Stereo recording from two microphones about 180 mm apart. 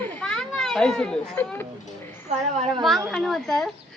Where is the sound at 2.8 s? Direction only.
Centre (ahead or behind).